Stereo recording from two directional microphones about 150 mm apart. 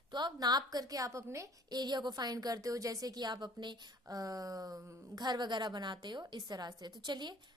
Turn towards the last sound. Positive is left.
turn(degrees=-30)  # may be behind; listen again after turning